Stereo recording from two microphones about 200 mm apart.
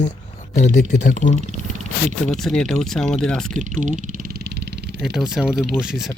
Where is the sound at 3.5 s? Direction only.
40° right (ahead or behind); by 4.7 s 55° right (ahead or behind).